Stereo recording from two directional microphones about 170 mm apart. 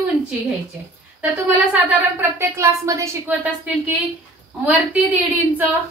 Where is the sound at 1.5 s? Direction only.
10° right (ahead or behind).